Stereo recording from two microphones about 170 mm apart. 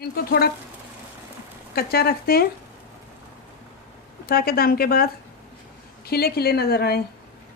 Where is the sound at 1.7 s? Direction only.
65° left (ahead or behind).